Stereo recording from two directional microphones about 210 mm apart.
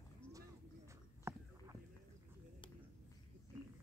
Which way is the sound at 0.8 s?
15° right (ahead or behind).